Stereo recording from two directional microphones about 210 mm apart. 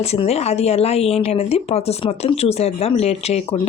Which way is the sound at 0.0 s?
30° left (ahead or behind).